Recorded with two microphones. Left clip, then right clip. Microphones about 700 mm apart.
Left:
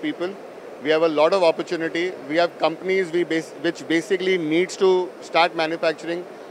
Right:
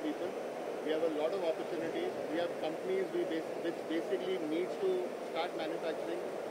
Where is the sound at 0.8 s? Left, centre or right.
Left.